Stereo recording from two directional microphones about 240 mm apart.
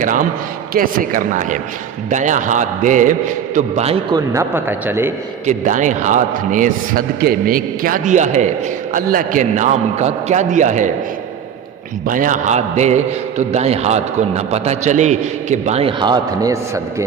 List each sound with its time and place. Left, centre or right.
0.0 s a man's voice: right
4.3 s speech: centre
5.5 s a man's voice: right
12.0 s a man's voice: right; by 17.1 s centre